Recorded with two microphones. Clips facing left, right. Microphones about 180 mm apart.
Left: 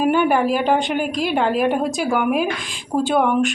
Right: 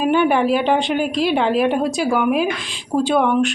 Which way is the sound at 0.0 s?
5° left (ahead or behind).